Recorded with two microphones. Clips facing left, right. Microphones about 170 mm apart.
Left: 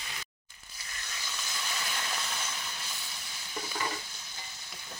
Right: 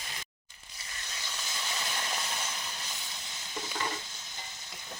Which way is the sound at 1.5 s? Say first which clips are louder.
Right 1 dB; 20° right (ahead or behind).